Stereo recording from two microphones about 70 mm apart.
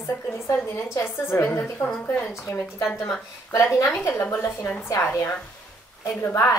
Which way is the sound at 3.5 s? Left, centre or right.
Left.